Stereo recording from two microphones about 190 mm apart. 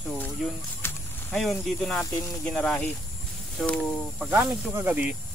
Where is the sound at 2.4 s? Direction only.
5° left (ahead or behind).